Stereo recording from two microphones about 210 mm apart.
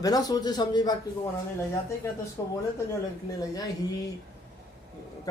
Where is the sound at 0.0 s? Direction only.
15° left (ahead or behind).